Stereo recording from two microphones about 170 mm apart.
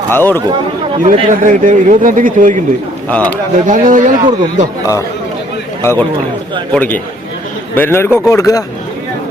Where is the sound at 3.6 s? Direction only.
50° right (ahead or behind).